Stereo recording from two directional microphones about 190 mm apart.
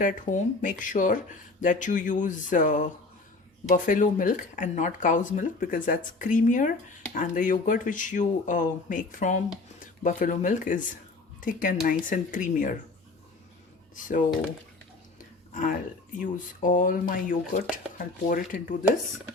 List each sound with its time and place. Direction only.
0.0 s speech: 40° left (ahead or behind)
13.9 s speech: 45° left (ahead or behind)
16.1 s speech: 45° left (ahead or behind)